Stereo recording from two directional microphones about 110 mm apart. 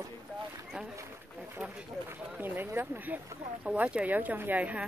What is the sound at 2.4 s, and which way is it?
Speech, 15° right (ahead or behind).